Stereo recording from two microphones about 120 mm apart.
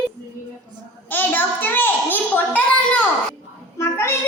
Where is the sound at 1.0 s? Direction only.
15° left (ahead or behind).